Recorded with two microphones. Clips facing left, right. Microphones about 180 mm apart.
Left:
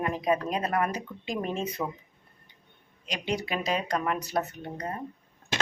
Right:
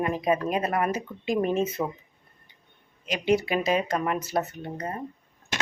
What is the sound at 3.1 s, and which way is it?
Speech, 5° right (ahead or behind).